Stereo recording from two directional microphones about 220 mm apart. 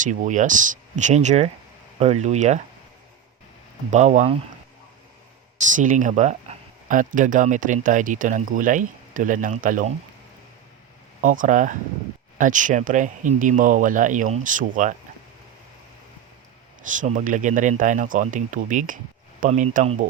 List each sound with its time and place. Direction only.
0.0 s speech: 35° right (ahead or behind)
3.9 s speech: 30° right (ahead or behind)
5.7 s speech: 35° right (ahead or behind)
11.2 s speech: 35° right (ahead or behind)
16.8 s speech: 35° right (ahead or behind)